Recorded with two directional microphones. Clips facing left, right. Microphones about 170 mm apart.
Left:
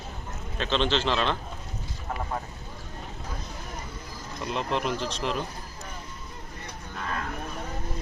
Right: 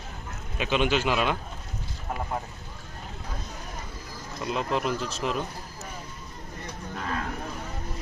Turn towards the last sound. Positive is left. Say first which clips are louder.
# right 1 dB
turn(degrees=-45)  # may be behind; listen again after turning